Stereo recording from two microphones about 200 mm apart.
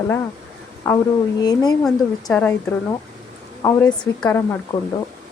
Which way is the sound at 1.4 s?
20° left (ahead or behind).